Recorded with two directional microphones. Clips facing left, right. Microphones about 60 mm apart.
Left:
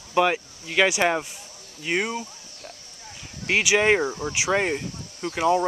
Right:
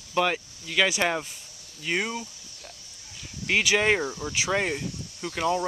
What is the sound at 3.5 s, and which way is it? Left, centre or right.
Speech, centre.